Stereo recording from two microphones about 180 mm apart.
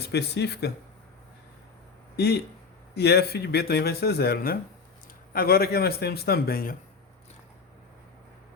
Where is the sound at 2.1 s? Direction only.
65° left (ahead or behind).